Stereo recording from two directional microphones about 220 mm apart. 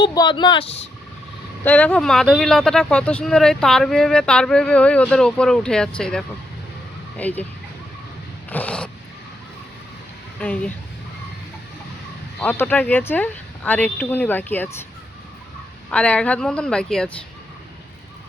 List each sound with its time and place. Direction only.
0.0 s speech: 20° left (ahead or behind)
1.6 s speech: 5° left (ahead or behind)
8.4 s speech: 5° left (ahead or behind)
10.4 s speech: 5° left (ahead or behind)
12.4 s speech: 10° left (ahead or behind)
15.9 s speech: 5° left (ahead or behind)